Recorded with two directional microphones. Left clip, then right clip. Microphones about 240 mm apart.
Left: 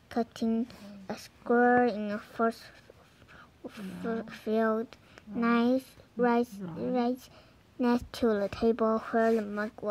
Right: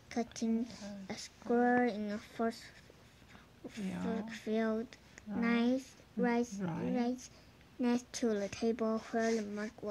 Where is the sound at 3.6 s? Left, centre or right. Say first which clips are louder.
Left 4 dB; left.